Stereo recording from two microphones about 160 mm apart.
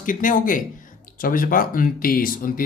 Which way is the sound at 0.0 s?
55° left (ahead or behind).